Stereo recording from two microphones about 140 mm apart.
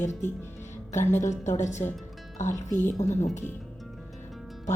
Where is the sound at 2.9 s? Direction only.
55° left (ahead or behind).